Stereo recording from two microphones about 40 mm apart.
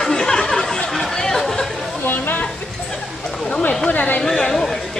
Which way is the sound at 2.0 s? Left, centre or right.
Left.